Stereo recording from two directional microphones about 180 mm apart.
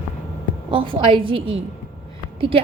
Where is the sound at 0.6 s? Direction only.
30° right (ahead or behind).